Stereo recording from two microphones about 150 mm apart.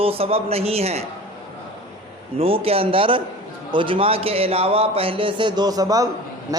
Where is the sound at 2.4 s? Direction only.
40° right (ahead or behind).